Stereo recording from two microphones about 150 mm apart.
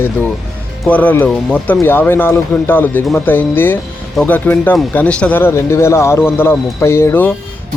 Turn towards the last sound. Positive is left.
turn(degrees=15)  # may be behind; listen again after turning